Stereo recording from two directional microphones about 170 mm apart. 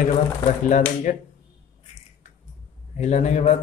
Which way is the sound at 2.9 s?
40° left (ahead or behind).